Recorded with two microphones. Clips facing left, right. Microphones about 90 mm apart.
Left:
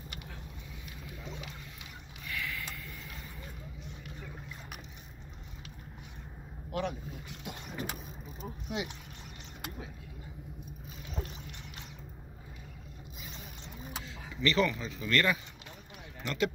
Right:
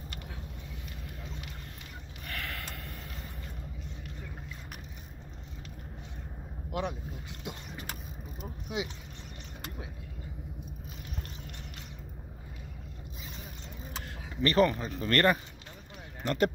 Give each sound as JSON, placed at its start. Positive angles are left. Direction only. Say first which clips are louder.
{"t": 2.2, "sound": "a sound", "louder": "left 1 dB", "side_deg": -60}
{"t": 6.7, "sound": "speech", "louder": "even", "side_deg": -20}
{"t": 8.4, "sound": "speech", "louder": "right 1 dB", "side_deg": -10}
{"t": 14.0, "sound": "speech", "louder": "right 2 dB", "side_deg": -45}